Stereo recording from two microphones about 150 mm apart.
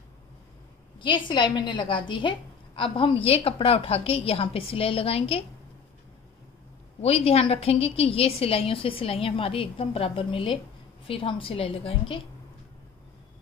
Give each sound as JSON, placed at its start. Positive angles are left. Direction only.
{"t": 0.9, "sound": "a woman's voice", "side_deg": 35}
{"t": 7.0, "sound": "a woman's voice", "side_deg": 40}